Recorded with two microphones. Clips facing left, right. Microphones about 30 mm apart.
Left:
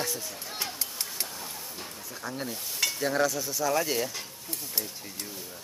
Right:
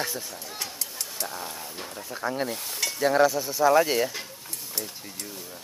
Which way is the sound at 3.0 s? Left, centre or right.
Centre.